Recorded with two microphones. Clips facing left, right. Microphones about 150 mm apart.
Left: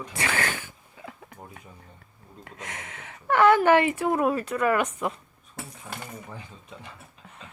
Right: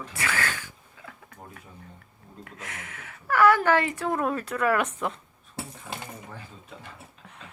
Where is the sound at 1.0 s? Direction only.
20° left (ahead or behind).